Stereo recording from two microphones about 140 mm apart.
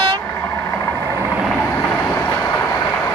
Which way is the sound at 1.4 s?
5° left (ahead or behind).